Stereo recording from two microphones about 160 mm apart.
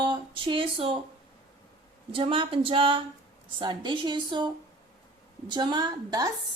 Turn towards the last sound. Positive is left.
turn(degrees=-25)  # may be behind; listen again after turning